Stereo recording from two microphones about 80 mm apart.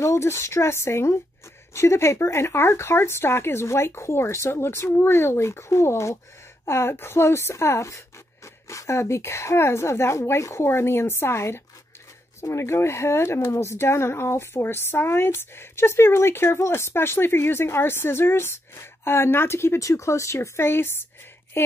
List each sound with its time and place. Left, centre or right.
0.0 s speech: left